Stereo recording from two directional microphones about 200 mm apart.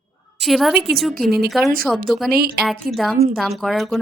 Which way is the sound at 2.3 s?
50° right (ahead or behind).